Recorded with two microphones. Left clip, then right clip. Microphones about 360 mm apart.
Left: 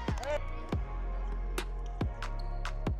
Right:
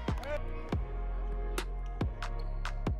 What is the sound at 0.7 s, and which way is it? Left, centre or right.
Music, centre.